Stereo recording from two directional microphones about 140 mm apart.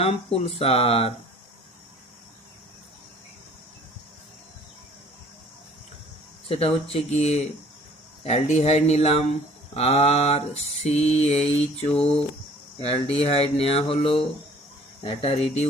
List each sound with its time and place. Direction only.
0.0 s mantra: 45° left (ahead or behind)
6.5 s mantra: 45° left (ahead or behind)